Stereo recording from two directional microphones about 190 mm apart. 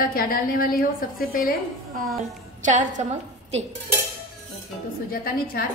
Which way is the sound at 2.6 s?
40° right (ahead or behind).